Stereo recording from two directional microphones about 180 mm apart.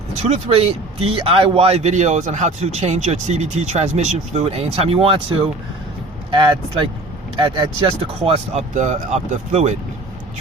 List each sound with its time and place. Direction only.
0.2 s a man's voice: 40° right (ahead or behind)